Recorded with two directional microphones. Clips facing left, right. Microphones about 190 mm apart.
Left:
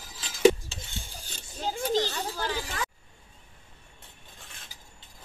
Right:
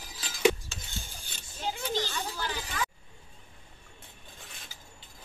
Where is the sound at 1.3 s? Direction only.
40° left (ahead or behind).